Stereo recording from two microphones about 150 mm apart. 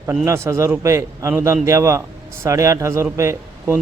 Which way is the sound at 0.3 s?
20° right (ahead or behind).